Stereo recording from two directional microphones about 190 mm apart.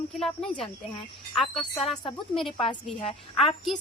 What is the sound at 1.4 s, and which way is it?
Speech, 30° left (ahead or behind).